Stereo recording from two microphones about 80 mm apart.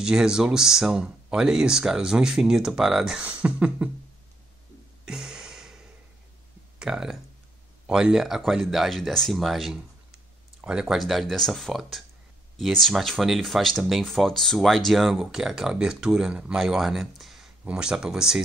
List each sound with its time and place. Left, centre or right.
0.0 s speech: centre
3.2 s speech: centre
5.0 s a sound: centre
6.8 s speech: centre